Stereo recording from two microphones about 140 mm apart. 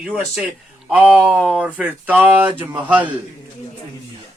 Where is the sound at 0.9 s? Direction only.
10° right (ahead or behind).